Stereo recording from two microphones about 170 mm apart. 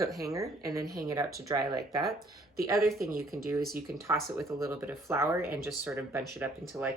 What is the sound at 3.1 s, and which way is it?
Speech, 60° right (ahead or behind).